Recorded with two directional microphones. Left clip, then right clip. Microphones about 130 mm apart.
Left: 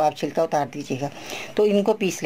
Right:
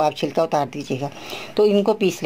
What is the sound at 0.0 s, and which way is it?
Speech, 15° right (ahead or behind).